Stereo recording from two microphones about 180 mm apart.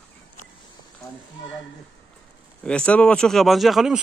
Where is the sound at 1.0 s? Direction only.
20° left (ahead or behind).